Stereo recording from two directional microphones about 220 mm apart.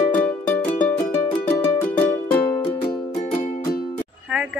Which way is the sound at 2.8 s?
25° left (ahead or behind).